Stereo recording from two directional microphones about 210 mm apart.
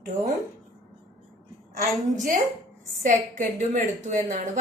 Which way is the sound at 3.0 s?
35° right (ahead or behind).